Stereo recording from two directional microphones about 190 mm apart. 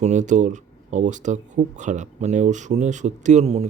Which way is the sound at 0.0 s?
40° right (ahead or behind).